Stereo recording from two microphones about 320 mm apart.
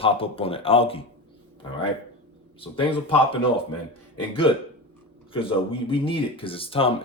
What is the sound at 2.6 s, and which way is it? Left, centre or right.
Speech, centre.